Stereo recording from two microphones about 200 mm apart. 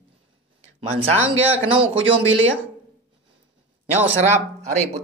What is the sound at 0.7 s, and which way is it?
Speech, 30° right (ahead or behind).